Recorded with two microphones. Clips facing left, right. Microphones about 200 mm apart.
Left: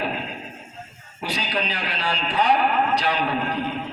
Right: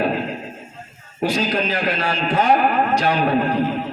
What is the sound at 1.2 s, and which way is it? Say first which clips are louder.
A man's voice: right 7 dB; 45° right (ahead or behind).